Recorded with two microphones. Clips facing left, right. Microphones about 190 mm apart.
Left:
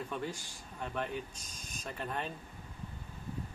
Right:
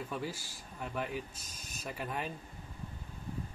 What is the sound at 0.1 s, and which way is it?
Speech, 5° right (ahead or behind).